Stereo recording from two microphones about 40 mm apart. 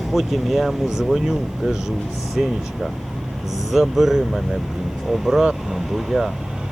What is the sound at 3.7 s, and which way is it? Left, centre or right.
Speech, centre.